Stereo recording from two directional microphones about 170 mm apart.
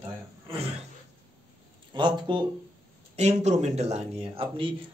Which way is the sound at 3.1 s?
40° right (ahead or behind).